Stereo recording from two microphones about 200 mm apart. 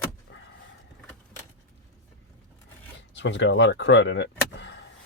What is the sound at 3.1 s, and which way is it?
Speech, 65° left (ahead or behind).